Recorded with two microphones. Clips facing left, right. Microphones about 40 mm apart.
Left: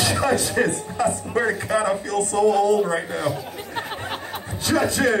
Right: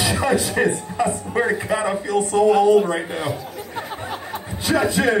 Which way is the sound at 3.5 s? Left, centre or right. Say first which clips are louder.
Even; left.